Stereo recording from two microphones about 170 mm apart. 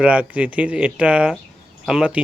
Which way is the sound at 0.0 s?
5° right (ahead or behind).